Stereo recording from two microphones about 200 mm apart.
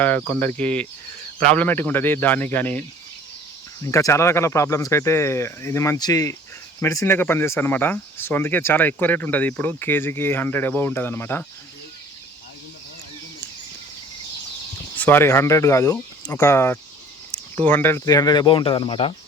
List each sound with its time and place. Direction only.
0.0 s speech: 10° left (ahead or behind)
3.8 s speech: 15° left (ahead or behind)
14.9 s speech: 10° left (ahead or behind); by 19.1 s 25° left (ahead or behind)